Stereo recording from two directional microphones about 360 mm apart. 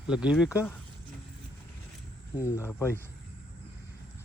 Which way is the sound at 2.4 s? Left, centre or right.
Centre.